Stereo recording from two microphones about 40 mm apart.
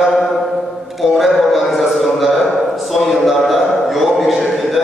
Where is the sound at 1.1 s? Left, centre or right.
Centre.